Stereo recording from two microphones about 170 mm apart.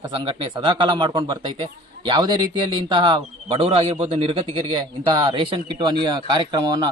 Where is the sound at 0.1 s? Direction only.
30° right (ahead or behind).